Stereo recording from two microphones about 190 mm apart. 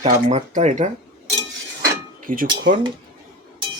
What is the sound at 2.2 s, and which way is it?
Speech, 50° right (ahead or behind).